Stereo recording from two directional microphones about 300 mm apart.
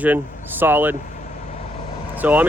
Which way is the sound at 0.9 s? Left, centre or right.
Left.